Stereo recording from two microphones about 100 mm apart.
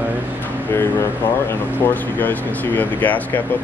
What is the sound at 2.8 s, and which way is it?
Speech, 15° left (ahead or behind).